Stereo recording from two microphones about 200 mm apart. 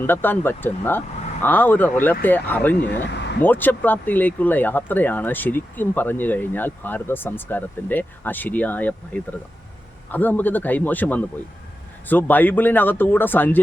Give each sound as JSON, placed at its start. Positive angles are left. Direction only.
{"t": 0.1, "sound": "speech", "side_deg": 10}
{"t": 3.1, "sound": "a sound", "side_deg": 60}
{"t": 3.4, "sound": "speech", "side_deg": 10}